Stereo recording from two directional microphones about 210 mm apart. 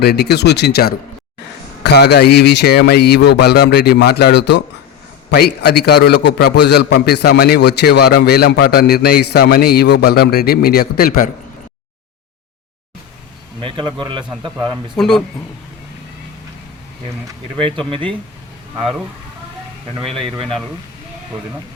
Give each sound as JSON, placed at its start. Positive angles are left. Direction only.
{"t": 0.0, "sound": "a man's voice", "side_deg": 50}
{"t": 13.6, "sound": "a man's voice", "side_deg": -25}
{"t": 14.9, "sound": "speech", "side_deg": 0}
{"t": 17.6, "sound": "a man's voice", "side_deg": -25}
{"t": 18.8, "sound": "speech", "side_deg": 0}
{"t": 20.1, "sound": "a man's voice", "side_deg": -25}